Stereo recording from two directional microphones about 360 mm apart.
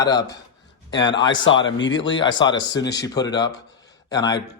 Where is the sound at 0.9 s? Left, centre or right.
Left.